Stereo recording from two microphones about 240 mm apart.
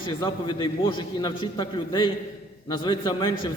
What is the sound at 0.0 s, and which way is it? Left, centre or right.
A man's voice, centre.